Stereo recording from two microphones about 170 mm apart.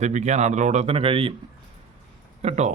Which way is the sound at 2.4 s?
40° right (ahead or behind).